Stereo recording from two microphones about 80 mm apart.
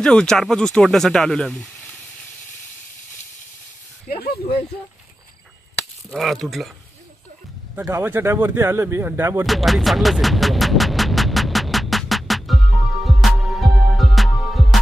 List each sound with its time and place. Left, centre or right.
0.0 s speech: centre
6.0 s speech: centre
7.9 s speech: right
9.5 s speech: centre
10.2 s music: centre